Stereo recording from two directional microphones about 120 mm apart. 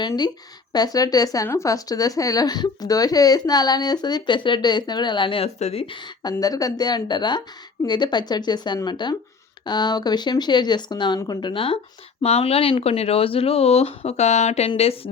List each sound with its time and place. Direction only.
0.7 s speech: 30° left (ahead or behind)
5.5 s speech: 60° left (ahead or behind); by 6.3 s 40° left (ahead or behind)
6.4 s speech: 30° left (ahead or behind); by 14.7 s 65° left (ahead or behind)
14.8 s speech: 55° left (ahead or behind)